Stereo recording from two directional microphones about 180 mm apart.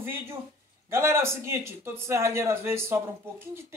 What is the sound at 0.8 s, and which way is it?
A man's voice, 15° right (ahead or behind).